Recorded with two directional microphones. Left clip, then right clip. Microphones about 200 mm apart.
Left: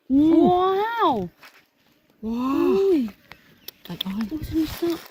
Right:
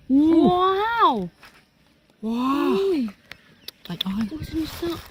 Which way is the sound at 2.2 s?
15° right (ahead or behind).